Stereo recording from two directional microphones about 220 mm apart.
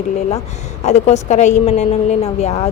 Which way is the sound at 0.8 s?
30° left (ahead or behind).